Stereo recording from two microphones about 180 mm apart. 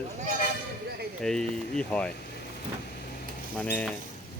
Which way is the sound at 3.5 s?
10° left (ahead or behind).